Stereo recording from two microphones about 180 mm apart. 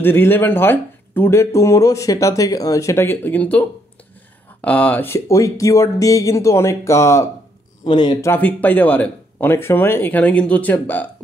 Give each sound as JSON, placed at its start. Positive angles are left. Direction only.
{"t": 0.0, "sound": "speech", "side_deg": 10}
{"t": 8.3, "sound": "speech", "side_deg": 10}